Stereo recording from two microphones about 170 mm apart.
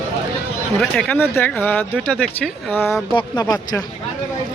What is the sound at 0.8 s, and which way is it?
Speech, 5° left (ahead or behind).